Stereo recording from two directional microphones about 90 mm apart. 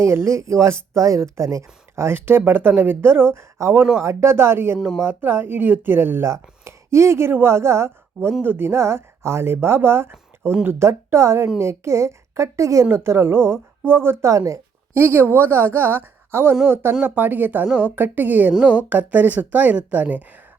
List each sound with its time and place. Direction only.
0.0 s a woman's voice: 30° right (ahead or behind)